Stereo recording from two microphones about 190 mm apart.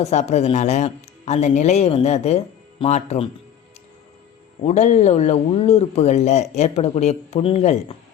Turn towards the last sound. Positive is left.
turn(degrees=30)  # may be behind; listen again after turning